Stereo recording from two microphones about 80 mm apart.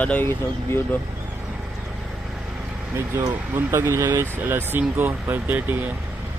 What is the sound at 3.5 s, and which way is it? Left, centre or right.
Speech, right.